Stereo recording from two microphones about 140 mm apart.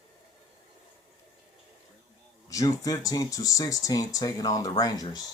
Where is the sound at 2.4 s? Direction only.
25° left (ahead or behind).